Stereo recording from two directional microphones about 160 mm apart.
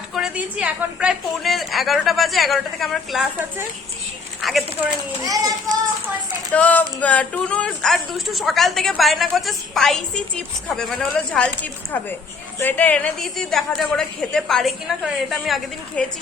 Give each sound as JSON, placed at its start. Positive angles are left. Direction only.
{"t": 0.1, "sound": "speech", "side_deg": -5}
{"t": 4.4, "sound": "a sound", "side_deg": 0}
{"t": 5.2, "sound": "a child's voice", "side_deg": -20}
{"t": 6.5, "sound": "speech", "side_deg": 10}